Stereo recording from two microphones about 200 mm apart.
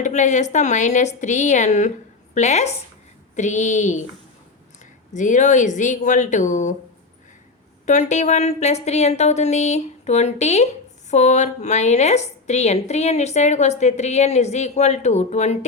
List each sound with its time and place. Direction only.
0.0 s a woman's voice: 35° left (ahead or behind)
5.1 s a woman's voice: 40° left (ahead or behind)
7.9 s a woman's voice: 35° left (ahead or behind)